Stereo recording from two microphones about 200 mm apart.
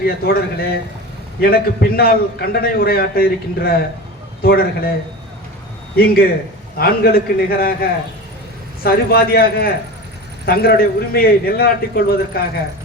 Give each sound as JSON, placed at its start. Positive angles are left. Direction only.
{"t": 0.0, "sound": "a man's voice", "side_deg": 50}
{"t": 6.7, "sound": "a man's voice", "side_deg": 50}